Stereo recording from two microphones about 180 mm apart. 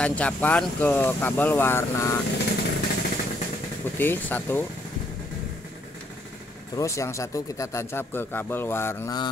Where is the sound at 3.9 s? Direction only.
10° left (ahead or behind).